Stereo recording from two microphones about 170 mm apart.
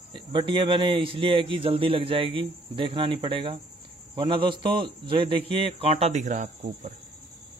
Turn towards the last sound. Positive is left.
turn(degrees=-45)  # may be behind; listen again after turning